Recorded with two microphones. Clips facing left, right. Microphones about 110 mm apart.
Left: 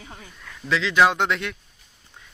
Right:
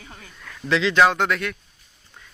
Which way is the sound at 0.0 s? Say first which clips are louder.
Left 1 dB; 20° left (ahead or behind).